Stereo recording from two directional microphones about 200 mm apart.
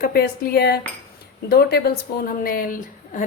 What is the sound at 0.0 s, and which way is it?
A woman's voice, 50° left (ahead or behind).